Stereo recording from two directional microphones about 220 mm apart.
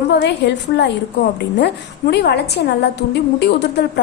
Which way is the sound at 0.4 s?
50° left (ahead or behind).